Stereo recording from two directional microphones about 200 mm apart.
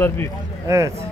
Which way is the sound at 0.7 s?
15° right (ahead or behind).